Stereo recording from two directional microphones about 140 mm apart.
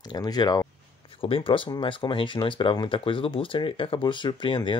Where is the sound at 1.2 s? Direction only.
40° left (ahead or behind).